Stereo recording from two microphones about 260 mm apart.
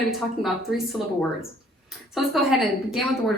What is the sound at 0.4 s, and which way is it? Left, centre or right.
A woman's voice, centre.